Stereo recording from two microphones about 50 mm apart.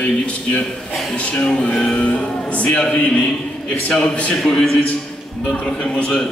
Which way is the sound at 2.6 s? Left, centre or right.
Centre.